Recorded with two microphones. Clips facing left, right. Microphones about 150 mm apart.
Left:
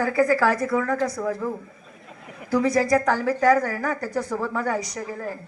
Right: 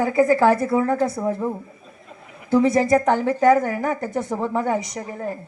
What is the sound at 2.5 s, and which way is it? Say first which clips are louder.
A woman's voice: right 3 dB; 25° right (ahead or behind).